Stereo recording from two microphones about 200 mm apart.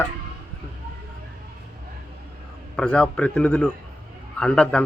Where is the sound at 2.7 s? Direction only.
5° left (ahead or behind).